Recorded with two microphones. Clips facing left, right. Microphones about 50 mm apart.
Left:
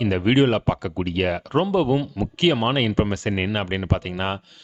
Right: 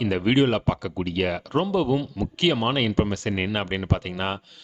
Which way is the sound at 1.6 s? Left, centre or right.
Left.